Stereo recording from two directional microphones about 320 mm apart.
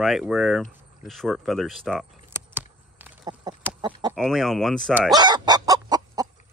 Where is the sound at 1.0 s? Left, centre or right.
Centre.